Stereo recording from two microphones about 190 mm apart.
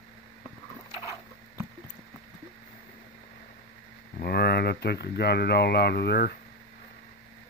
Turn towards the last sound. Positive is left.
turn(degrees=55)  # may be behind; listen again after turning